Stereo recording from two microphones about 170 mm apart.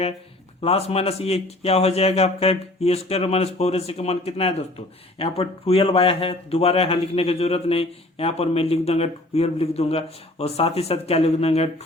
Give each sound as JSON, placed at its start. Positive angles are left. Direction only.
{"t": 0.6, "sound": "speech", "side_deg": 35}